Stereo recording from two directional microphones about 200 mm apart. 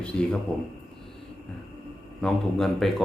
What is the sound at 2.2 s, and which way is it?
Speech, centre (ahead or behind).